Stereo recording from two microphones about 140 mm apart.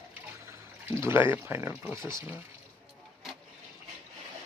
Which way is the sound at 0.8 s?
20° right (ahead or behind).